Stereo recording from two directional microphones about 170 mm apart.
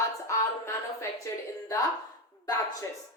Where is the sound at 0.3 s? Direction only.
15° left (ahead or behind).